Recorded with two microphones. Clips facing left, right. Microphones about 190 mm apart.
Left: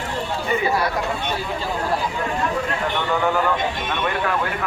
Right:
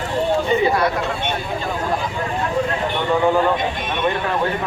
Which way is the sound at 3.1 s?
20° right (ahead or behind).